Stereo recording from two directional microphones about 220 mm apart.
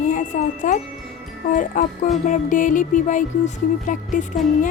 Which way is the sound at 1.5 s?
35° left (ahead or behind).